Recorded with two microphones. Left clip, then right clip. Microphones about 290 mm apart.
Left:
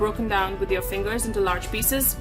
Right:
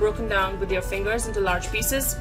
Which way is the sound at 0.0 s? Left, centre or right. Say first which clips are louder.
Right 1 dB; left.